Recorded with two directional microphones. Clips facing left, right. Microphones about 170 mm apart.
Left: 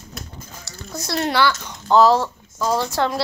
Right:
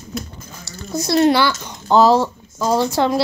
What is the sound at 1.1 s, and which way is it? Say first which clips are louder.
Speech: right 5 dB; 15° right (ahead or behind).